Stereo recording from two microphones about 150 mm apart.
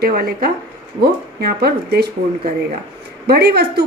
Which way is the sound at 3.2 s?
90° right.